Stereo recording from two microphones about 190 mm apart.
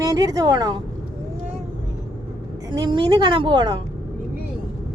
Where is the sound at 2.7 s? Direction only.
25° right (ahead or behind).